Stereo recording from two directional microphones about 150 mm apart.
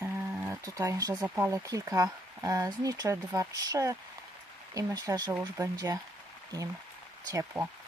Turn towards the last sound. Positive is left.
turn(degrees=-15)  # may be behind; listen again after turning